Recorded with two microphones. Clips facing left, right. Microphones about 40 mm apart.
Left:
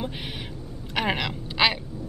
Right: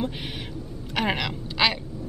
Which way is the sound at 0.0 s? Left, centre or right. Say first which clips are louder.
Right 2 dB; centre.